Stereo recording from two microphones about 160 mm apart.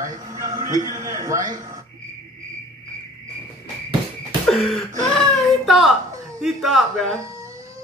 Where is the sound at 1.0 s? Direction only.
20° right (ahead or behind).